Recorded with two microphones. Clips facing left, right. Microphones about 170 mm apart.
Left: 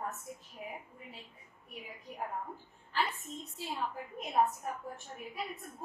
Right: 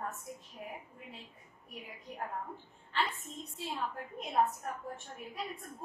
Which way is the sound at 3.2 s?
Centre (ahead or behind).